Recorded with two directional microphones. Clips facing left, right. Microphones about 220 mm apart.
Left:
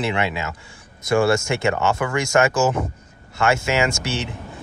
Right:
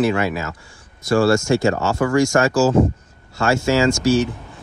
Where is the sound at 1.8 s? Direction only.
40° right (ahead or behind).